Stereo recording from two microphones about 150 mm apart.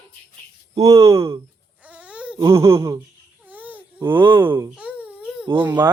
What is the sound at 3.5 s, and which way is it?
Baby cry, 10° right (ahead or behind).